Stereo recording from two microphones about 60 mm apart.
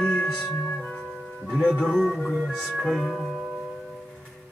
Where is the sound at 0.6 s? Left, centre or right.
Centre.